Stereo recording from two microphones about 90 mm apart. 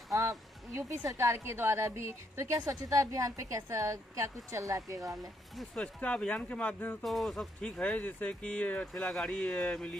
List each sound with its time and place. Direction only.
0.1 s a woman's voice: 35° right (ahead or behind)
5.9 s speech: 15° left (ahead or behind)
7.0 s a sound: centre (ahead or behind)
7.6 s speech: 15° left (ahead or behind)